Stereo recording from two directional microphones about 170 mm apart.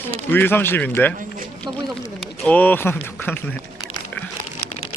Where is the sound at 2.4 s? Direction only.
10° left (ahead or behind).